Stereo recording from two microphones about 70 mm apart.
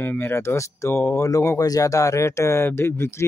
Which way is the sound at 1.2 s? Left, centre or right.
Left.